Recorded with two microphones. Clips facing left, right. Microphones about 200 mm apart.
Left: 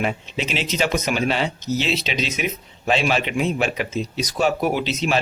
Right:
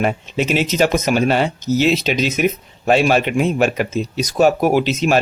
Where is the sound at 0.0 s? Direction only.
50° right (ahead or behind).